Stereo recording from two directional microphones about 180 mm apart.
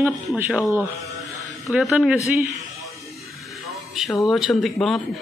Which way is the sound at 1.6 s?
Centre (ahead or behind).